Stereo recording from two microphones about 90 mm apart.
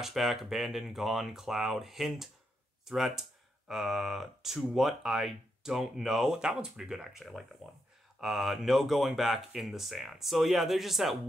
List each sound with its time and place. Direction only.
0.0 s speech: 5° right (ahead or behind)